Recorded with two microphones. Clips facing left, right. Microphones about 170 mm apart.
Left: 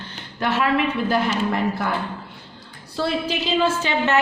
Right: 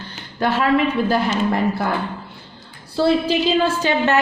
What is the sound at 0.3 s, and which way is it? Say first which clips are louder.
Speech: right 3 dB; 35° right (ahead or behind).